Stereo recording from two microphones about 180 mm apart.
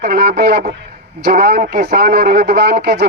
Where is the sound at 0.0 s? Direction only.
55° right (ahead or behind).